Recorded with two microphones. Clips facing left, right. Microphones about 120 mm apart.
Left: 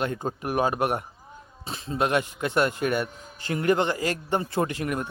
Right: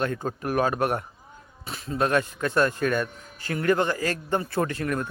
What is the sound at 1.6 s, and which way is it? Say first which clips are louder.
Speech: even; 25° left (ahead or behind).